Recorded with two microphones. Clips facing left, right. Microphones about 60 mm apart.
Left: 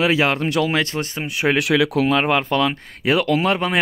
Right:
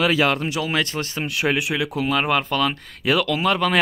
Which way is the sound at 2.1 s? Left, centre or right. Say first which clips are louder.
Left 3 dB; left.